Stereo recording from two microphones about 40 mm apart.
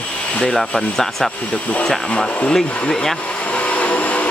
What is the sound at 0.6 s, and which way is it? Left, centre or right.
Speech, centre.